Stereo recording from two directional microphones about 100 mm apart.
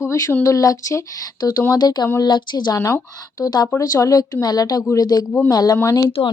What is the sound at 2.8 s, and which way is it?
Speech, 30° left (ahead or behind).